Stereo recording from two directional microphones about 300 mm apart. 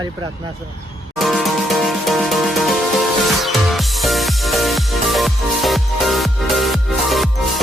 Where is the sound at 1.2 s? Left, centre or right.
Centre.